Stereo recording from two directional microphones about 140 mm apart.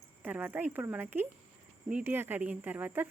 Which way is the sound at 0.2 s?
10° right (ahead or behind).